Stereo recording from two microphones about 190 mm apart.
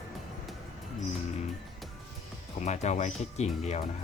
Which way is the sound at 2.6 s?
35° left (ahead or behind).